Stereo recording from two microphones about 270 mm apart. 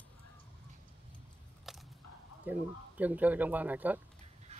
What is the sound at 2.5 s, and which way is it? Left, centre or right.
Speech, centre.